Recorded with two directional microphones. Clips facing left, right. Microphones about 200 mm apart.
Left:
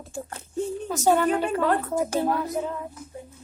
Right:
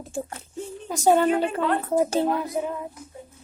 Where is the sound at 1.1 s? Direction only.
30° right (ahead or behind).